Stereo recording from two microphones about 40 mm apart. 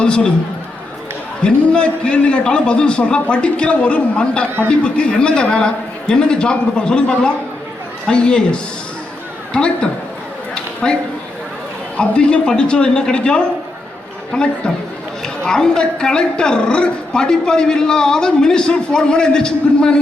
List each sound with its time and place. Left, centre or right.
0.0 s a woman's voice: centre
1.4 s a man's voice: left
10.8 s speech: centre
11.9 s a man's voice: left
15.4 s a man's voice: centre